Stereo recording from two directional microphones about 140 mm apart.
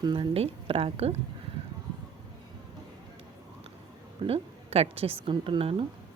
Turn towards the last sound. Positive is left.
turn(degrees=-40)  # may be behind; listen again after turning